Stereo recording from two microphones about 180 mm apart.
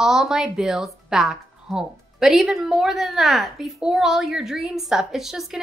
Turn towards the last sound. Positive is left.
turn(degrees=0)  # may be behind; listen again after turning